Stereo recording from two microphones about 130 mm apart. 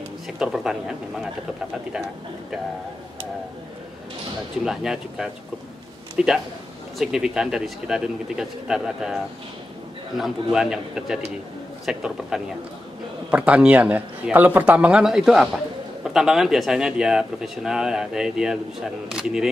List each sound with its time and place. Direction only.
0.4 s speech: 5° right (ahead or behind)
4.6 s speech: 5° right (ahead or behind)
10.1 s speech: 5° right (ahead or behind)